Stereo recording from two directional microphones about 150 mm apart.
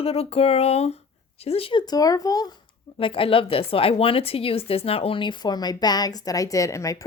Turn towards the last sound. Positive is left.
turn(degrees=20)  # may be behind; listen again after turning